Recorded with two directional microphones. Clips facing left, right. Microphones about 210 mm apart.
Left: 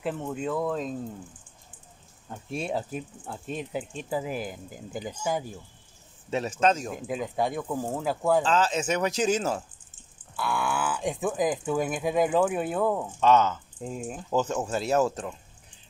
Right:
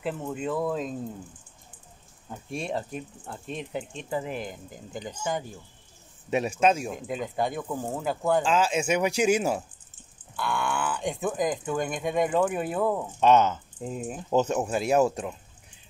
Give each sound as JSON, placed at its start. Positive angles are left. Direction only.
{"t": 0.0, "sound": "speech", "side_deg": 0}
{"t": 2.2, "sound": "speech", "side_deg": 0}
{"t": 6.3, "sound": "speech", "side_deg": -10}
{"t": 8.5, "sound": "speech", "side_deg": -10}
{"t": 10.3, "sound": "speech", "side_deg": 5}
{"t": 13.2, "sound": "speech", "side_deg": -20}
{"t": 13.7, "sound": "speech", "side_deg": -5}
{"t": 14.3, "sound": "speech", "side_deg": -20}